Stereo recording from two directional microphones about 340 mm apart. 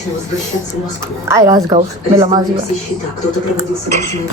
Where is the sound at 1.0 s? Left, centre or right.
Centre.